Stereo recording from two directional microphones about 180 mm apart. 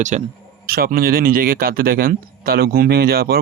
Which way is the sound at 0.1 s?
40° right (ahead or behind).